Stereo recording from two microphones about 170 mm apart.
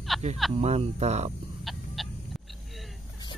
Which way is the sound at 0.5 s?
40° right (ahead or behind).